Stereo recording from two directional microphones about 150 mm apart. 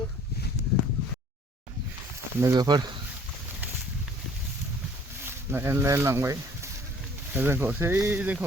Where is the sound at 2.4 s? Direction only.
25° right (ahead or behind).